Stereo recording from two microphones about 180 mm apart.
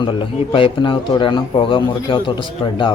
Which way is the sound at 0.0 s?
30° left (ahead or behind).